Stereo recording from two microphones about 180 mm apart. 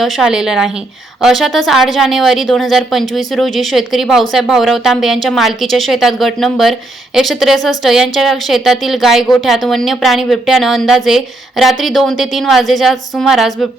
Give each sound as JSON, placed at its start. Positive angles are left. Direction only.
{"t": 0.0, "sound": "speech", "side_deg": -5}